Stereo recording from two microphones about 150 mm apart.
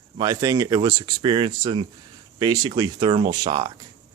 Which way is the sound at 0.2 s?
25° right (ahead or behind).